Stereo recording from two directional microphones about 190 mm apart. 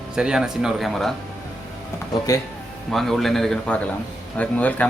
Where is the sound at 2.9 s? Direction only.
Centre (ahead or behind).